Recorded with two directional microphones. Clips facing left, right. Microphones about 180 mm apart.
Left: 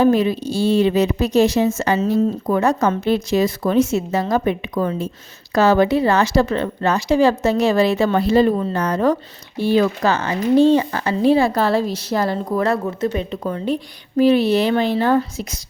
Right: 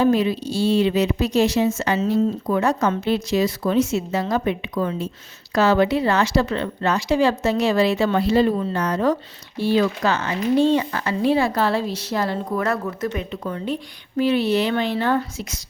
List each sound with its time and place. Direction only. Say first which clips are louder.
0.0 s a woman's voice: left 3 dB; 50° left (ahead or behind)